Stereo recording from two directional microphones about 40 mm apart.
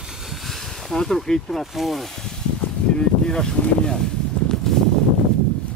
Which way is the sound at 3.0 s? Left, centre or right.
Centre.